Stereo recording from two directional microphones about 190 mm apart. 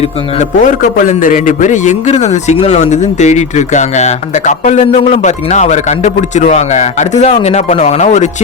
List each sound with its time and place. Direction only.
0.3 s a man's voice: 40° left (ahead or behind)